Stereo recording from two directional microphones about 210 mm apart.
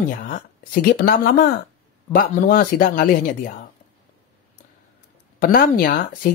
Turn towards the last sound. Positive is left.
turn(degrees=40)  # may be behind; listen again after turning